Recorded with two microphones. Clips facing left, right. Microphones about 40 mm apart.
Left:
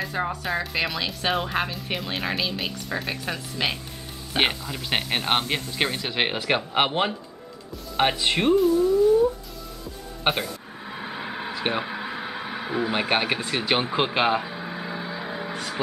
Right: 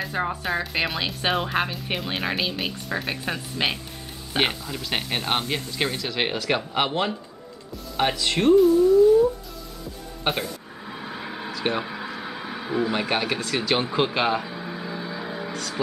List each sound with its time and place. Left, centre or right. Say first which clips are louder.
0.0 s music: right 1 dB; centre
0.5 s speech: right 1 dB; centre
4.4 s speech: left 1 dB; centre
10.3 s a sound: even; centre
15.5 s music: even; left